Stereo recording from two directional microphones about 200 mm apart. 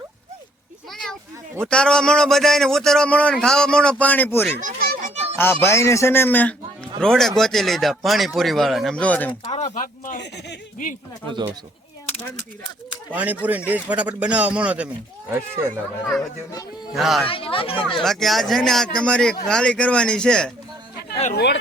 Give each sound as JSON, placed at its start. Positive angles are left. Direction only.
{"t": 1.6, "sound": "a man's voice", "side_deg": 5}
{"t": 4.6, "sound": "children playing", "side_deg": -45}
{"t": 5.1, "sound": "a sound", "side_deg": -30}
{"t": 5.4, "sound": "a man's voice", "side_deg": 10}
{"t": 9.5, "sound": "speech", "side_deg": 35}
{"t": 10.2, "sound": "speech", "side_deg": 55}
{"t": 13.1, "sound": "a man's voice", "side_deg": -10}
{"t": 16.0, "sound": "a child's voice", "side_deg": 10}
{"t": 16.9, "sound": "a man's voice", "side_deg": 0}
{"t": 17.2, "sound": "speech", "side_deg": 25}
{"t": 18.0, "sound": "a man's voice", "side_deg": 0}
{"t": 21.3, "sound": "speech", "side_deg": 60}